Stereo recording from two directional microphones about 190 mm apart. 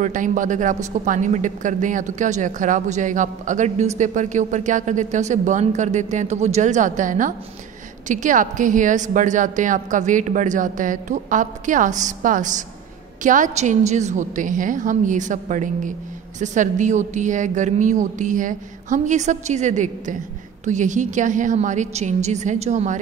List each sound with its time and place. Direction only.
0.0 s speech: 45° right (ahead or behind)